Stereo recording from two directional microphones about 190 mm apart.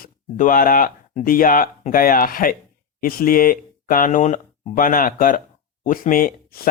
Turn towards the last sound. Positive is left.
turn(degrees=50)  # may be behind; listen again after turning